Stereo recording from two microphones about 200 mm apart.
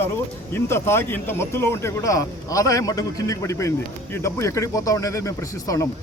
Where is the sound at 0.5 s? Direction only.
10° left (ahead or behind).